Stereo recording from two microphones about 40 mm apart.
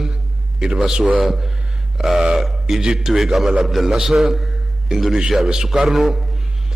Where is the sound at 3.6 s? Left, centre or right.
Centre.